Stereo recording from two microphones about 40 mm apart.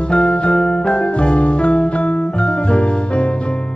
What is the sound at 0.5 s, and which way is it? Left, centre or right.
Music, centre.